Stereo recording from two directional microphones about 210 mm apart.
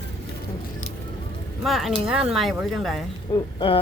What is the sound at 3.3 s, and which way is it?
Speech, 25° left (ahead or behind).